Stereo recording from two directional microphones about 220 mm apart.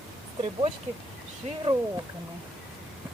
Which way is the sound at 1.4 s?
30° right (ahead or behind).